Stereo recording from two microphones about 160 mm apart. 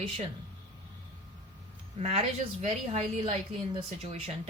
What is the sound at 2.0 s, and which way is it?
A woman's voice, 40° right (ahead or behind).